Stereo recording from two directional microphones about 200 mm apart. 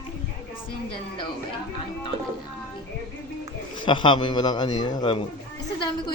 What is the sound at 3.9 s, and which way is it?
A man's voice, 25° left (ahead or behind).